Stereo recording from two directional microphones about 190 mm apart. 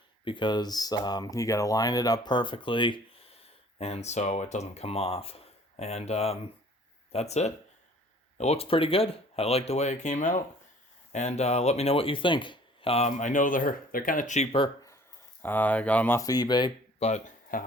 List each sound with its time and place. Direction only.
0.3 s speech: 25° left (ahead or behind)
15.4 s speech: 10° left (ahead or behind)
17.1 s speech: 40° left (ahead or behind)